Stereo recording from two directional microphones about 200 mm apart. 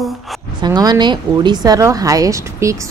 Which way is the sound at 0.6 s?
20° right (ahead or behind).